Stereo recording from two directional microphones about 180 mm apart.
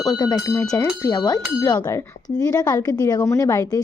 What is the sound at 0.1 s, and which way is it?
A woman's voice, 20° left (ahead or behind).